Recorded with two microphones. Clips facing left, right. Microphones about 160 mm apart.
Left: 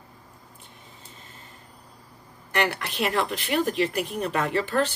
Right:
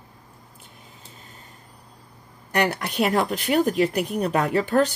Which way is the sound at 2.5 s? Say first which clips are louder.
Right 3 dB; 45° right (ahead or behind).